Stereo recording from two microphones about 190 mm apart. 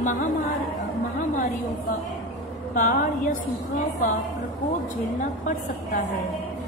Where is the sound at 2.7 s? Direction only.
45° left (ahead or behind).